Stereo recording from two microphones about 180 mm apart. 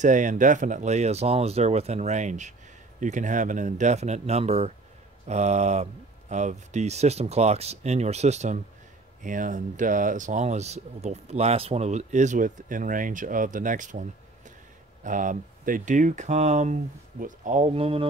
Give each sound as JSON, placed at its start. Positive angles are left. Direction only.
{"t": 0.0, "sound": "speech", "side_deg": -45}
{"t": 15.0, "sound": "speech", "side_deg": -45}